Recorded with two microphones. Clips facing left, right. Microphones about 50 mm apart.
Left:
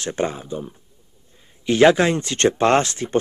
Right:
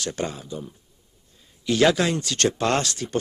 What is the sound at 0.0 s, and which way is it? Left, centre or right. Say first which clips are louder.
Speech: left 5 dB; left.